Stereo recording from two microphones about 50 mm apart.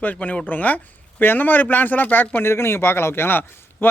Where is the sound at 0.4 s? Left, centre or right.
Left.